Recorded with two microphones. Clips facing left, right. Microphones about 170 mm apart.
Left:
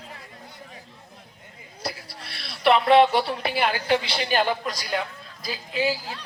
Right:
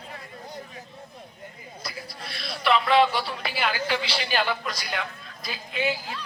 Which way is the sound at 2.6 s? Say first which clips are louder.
Left 4 dB; 60° left (ahead or behind).